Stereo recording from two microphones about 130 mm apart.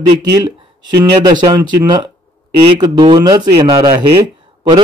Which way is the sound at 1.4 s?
30° right (ahead or behind).